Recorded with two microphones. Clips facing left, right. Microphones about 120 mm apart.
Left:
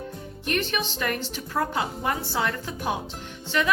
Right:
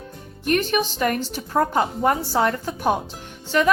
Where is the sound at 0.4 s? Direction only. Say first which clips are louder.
Right 7 dB; 45° right (ahead or behind).